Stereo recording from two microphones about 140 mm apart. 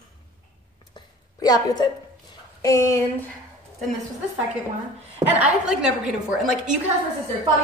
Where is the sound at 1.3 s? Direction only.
25° left (ahead or behind).